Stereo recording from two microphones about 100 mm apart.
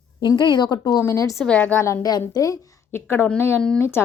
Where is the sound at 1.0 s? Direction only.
30° left (ahead or behind).